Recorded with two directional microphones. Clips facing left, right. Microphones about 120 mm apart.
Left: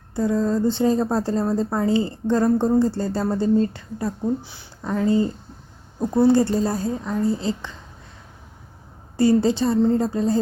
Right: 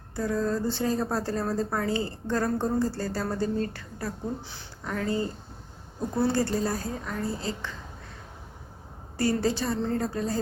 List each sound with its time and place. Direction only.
0.2 s a woman's voice: 20° left (ahead or behind)
9.1 s a woman's voice: 25° left (ahead or behind)